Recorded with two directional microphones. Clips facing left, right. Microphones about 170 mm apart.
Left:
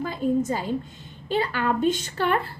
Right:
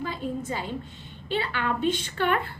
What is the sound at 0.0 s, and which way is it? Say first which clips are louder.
A woman's voice: left 7 dB; 45° left (ahead or behind).